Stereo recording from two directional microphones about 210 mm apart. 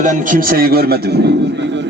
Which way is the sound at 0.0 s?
40° right (ahead or behind).